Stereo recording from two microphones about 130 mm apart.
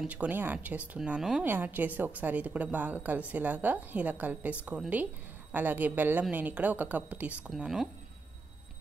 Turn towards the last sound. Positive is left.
turn(degrees=-5)  # may be behind; listen again after turning